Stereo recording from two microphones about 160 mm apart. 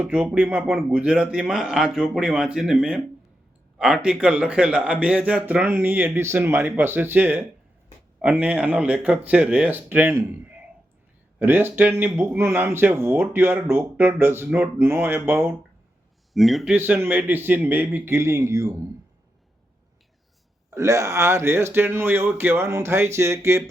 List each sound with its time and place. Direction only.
0.0 s speech: 5° right (ahead or behind)
16.3 s speech: centre (ahead or behind)
16.7 s speech: 10° right (ahead or behind)
20.7 s speech: 20° right (ahead or behind)